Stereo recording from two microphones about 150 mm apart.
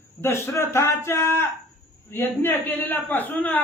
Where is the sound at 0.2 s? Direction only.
15° left (ahead or behind).